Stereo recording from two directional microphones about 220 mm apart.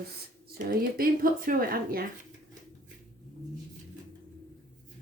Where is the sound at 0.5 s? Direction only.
40° right (ahead or behind).